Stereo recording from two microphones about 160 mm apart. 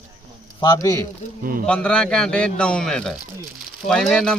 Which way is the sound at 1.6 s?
5° left (ahead or behind).